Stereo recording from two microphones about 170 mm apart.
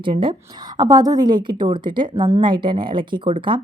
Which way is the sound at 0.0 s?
30° right (ahead or behind).